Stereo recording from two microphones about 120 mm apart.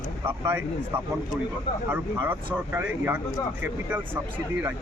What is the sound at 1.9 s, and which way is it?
Speech, 20° right (ahead or behind).